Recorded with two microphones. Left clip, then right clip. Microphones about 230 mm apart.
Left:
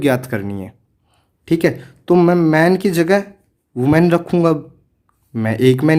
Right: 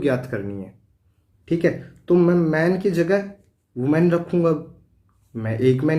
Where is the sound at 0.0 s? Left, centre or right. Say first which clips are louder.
Left 5 dB; left.